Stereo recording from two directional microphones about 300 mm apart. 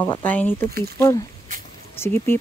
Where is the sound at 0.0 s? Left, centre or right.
Centre.